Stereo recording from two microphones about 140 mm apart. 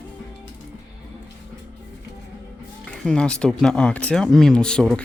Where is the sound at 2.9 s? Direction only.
5° left (ahead or behind).